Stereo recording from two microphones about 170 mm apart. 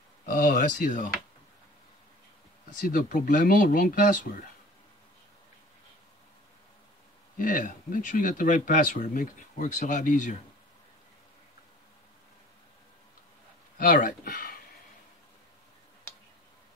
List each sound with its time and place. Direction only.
0.2 s speech: 50° left (ahead or behind)
2.8 s speech: 50° left (ahead or behind)
7.3 s speech: 55° left (ahead or behind)
13.7 s speech: 50° left (ahead or behind)